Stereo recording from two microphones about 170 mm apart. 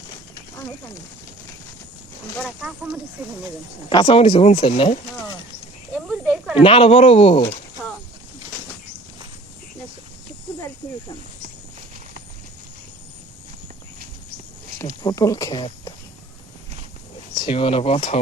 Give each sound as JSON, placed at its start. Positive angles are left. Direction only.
{"t": 2.4, "sound": "speech", "side_deg": 0}
{"t": 3.8, "sound": "speech", "side_deg": 30}
{"t": 6.1, "sound": "speech", "side_deg": -5}
{"t": 6.6, "sound": "speech", "side_deg": 35}
{"t": 14.8, "sound": "speech", "side_deg": 20}
{"t": 17.3, "sound": "speech", "side_deg": 30}